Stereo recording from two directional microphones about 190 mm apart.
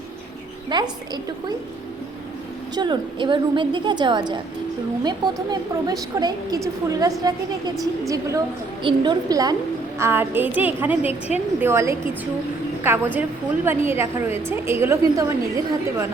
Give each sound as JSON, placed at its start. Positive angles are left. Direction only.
{"t": 0.7, "sound": "a woman's voice", "side_deg": -20}
{"t": 2.7, "sound": "a woman's voice", "side_deg": -25}